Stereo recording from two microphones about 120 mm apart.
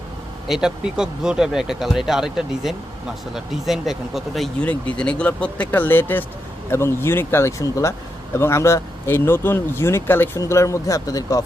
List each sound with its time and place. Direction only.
0.4 s speech: 5° right (ahead or behind)
4.6 s speech: 10° left (ahead or behind); by 11.4 s 30° left (ahead or behind)